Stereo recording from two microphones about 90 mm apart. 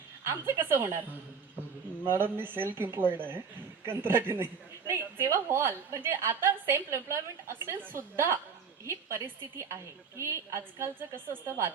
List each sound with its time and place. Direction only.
0.3 s a woman's voice: 30° right (ahead or behind)
2.0 s a woman's voice: 25° right (ahead or behind)